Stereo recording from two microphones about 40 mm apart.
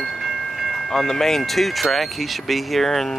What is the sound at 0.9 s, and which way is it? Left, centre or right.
Speech, centre.